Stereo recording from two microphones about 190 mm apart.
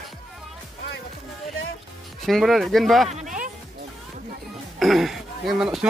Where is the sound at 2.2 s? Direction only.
Centre (ahead or behind).